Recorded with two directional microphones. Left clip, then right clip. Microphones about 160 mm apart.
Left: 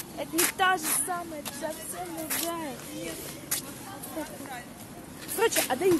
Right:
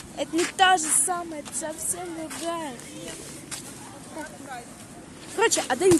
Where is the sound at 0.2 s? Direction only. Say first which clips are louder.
Right 6 dB; 70° right (ahead or behind).